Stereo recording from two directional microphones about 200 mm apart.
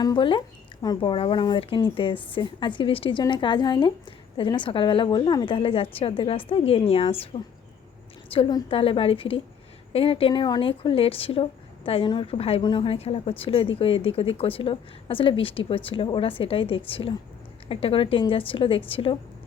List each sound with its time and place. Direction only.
0.0 s speech: 20° left (ahead or behind)
8.3 s speech: 25° left (ahead or behind)